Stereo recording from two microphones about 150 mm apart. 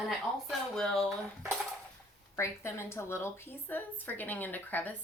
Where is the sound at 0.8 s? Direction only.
5° left (ahead or behind).